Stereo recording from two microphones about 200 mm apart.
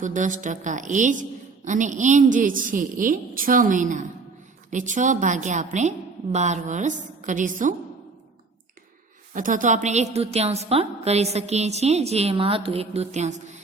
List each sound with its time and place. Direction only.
0.0 s a woman's voice: 40° right (ahead or behind)
9.3 s a woman's voice: 40° right (ahead or behind)